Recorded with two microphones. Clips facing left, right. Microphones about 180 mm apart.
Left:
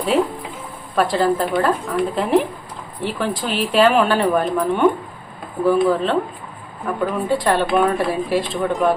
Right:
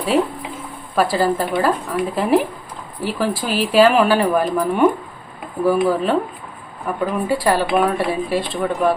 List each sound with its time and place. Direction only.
0.9 s speech: 5° right (ahead or behind)